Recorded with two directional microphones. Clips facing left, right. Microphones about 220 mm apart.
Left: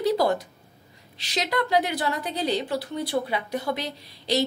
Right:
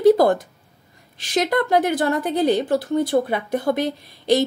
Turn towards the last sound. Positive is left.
turn(degrees=-50)  # may be behind; listen again after turning